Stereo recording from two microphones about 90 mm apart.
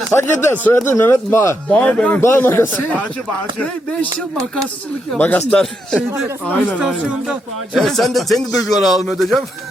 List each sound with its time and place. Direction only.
0.1 s speech: 30° left (ahead or behind)
1.7 s speech: 15° left (ahead or behind)
2.2 s speech: 25° left (ahead or behind)
7.1 s speech: 10° right (ahead or behind)
7.9 s speech: centre (ahead or behind)